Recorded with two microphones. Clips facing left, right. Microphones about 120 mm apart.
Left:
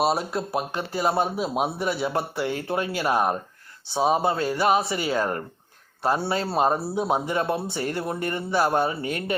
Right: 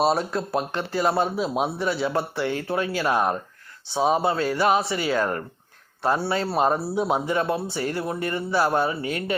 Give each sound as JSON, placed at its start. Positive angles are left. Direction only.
{"t": 0.0, "sound": "a man's voice", "side_deg": 10}
{"t": 7.7, "sound": "speech", "side_deg": -30}
{"t": 7.9, "sound": "a man's voice", "side_deg": 25}